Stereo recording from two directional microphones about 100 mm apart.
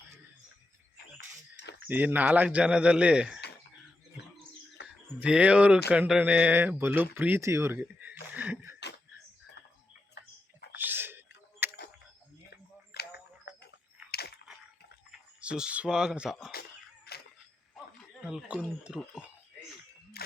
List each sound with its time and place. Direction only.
1.9 s speech: 15° right (ahead or behind)
5.2 s speech: 10° right (ahead or behind)
10.8 s whispering: 20° right (ahead or behind)
11.6 s camera: 20° right (ahead or behind)
15.4 s speech: 10° right (ahead or behind)
18.2 s speech: 10° right (ahead or behind)